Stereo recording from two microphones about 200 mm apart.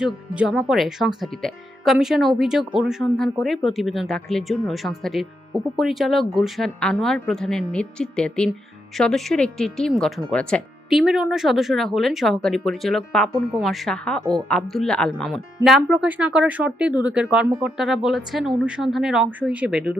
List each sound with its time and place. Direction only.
0.0 s speech: centre (ahead or behind)